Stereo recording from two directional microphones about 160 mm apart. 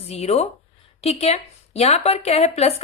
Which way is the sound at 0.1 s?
40° left (ahead or behind).